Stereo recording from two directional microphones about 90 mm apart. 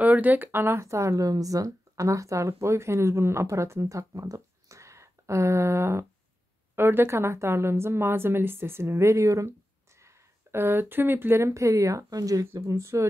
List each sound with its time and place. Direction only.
0.0 s a woman's voice: 20° right (ahead or behind)